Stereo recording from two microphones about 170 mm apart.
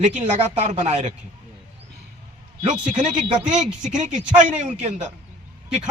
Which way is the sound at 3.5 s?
45° right (ahead or behind).